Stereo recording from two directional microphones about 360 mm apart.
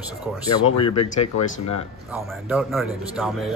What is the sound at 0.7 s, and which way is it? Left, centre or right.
Speech, centre.